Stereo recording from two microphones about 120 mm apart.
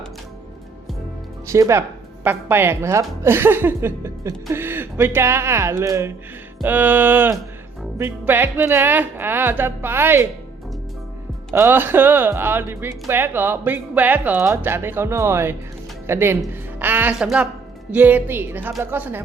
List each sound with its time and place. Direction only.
1.5 s a woman's voice: 25° right (ahead or behind)
11.5 s a woman's voice: 20° right (ahead or behind)